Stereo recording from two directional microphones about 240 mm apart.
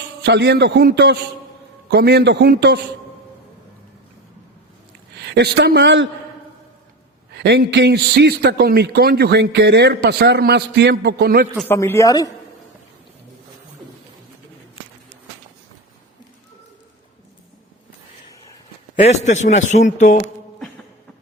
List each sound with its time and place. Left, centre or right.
0.2 s a man's voice: right
5.2 s a man's voice: right
7.3 s a man's voice: right
11.5 s speech: centre
18.9 s speech: left